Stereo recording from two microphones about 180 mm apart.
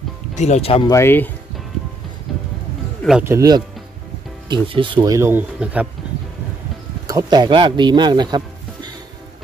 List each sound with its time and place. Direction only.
0.3 s speech: 40° left (ahead or behind)
0.8 s speech: 15° left (ahead or behind)
3.0 s a sound: centre (ahead or behind)
3.3 s speech: 20° right (ahead or behind)
7.1 s speech: 20° right (ahead or behind)